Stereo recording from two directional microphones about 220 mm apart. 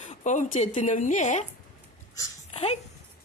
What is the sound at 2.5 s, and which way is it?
Speech, 30° left (ahead or behind).